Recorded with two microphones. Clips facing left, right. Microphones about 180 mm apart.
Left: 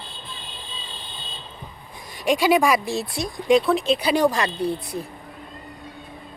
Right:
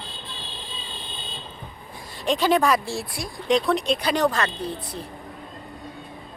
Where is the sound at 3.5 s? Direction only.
Centre (ahead or behind).